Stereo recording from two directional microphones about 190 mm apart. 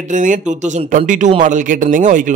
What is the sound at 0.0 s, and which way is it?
A man's voice, 40° right (ahead or behind).